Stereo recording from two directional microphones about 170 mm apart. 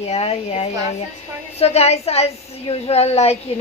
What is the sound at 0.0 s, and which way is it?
A woman's voice, 40° left (ahead or behind).